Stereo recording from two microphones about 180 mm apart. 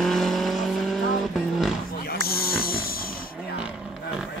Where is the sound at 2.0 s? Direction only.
55° left (ahead or behind).